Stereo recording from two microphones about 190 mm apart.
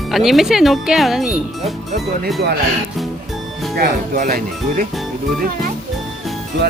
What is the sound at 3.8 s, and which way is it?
Speech, 50° right (ahead or behind).